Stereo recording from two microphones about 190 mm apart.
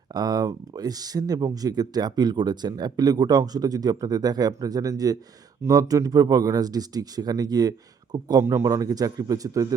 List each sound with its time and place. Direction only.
0.1 s speech: 20° right (ahead or behind)